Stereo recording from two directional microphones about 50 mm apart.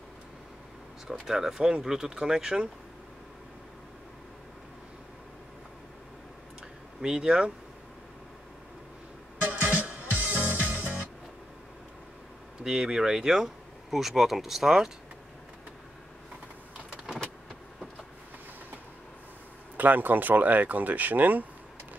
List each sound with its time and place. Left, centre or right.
1.2 s speech: centre
7.0 s speech: centre
9.5 s music: right
12.6 s speech: centre
19.8 s speech: right